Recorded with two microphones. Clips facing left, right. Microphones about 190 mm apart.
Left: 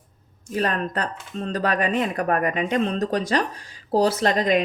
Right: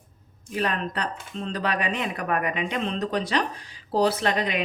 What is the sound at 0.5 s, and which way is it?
Speech, 45° left (ahead or behind).